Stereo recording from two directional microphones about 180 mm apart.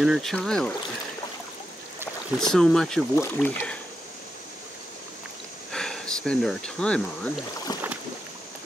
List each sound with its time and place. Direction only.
0.0 s speech: centre (ahead or behind)
2.4 s speech: centre (ahead or behind)
5.7 s speech: 5° left (ahead or behind)
7.7 s rowboat: 20° left (ahead or behind)